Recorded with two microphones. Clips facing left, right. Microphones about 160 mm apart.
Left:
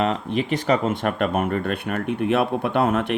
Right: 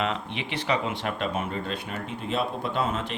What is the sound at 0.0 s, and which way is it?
Speech, 40° left (ahead or behind).